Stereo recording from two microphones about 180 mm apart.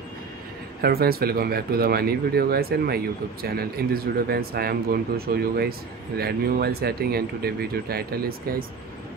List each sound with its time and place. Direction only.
0.7 s speech: 60° right (ahead or behind)